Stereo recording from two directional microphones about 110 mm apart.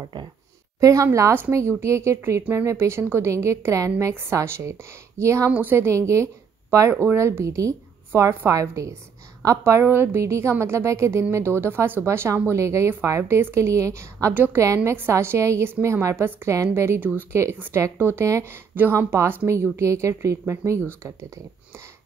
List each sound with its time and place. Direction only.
0.7 s a woman's voice: 30° right (ahead or behind)
14.3 s a woman's voice: 15° right (ahead or behind)